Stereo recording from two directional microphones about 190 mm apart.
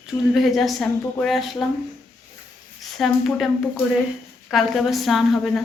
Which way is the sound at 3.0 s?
Centre (ahead or behind).